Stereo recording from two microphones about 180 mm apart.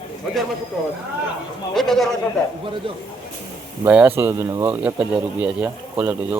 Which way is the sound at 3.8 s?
10° right (ahead or behind).